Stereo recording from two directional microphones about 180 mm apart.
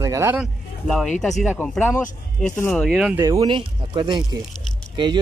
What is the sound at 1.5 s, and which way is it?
Speech, 10° left (ahead or behind).